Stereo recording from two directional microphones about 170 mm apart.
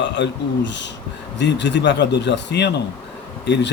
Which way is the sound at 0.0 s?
90° left.